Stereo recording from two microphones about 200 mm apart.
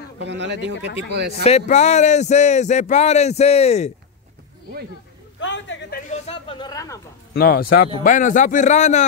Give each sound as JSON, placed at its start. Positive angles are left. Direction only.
{"t": 0.2, "sound": "speech", "side_deg": -60}
{"t": 1.4, "sound": "speech", "side_deg": 35}
{"t": 5.4, "sound": "speech", "side_deg": 65}
{"t": 7.3, "sound": "a man's voice", "side_deg": 50}